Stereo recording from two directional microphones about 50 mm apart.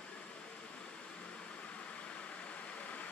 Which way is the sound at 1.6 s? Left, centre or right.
Left.